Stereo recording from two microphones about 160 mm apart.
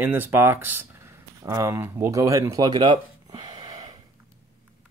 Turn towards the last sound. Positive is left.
turn(degrees=-25)  # may be behind; listen again after turning